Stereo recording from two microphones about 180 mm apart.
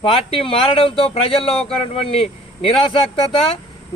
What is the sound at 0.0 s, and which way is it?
Speech, 30° left (ahead or behind).